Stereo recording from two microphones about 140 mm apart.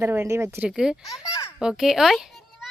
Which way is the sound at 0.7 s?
5° right (ahead or behind).